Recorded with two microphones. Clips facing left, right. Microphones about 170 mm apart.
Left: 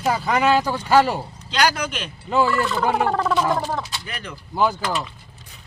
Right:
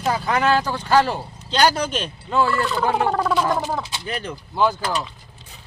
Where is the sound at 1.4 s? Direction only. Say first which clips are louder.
Right 3 dB; 30° right (ahead or behind).